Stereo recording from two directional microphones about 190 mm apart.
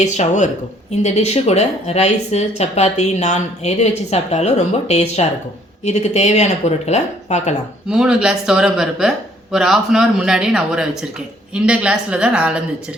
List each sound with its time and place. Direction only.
0.0 s speech: 40° left (ahead or behind)
7.9 s speech: 5° right (ahead or behind)